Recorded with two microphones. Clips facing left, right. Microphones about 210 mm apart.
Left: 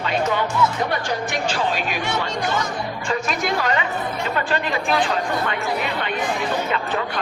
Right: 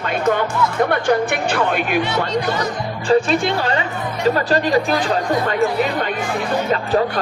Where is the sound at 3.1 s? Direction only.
30° right (ahead or behind).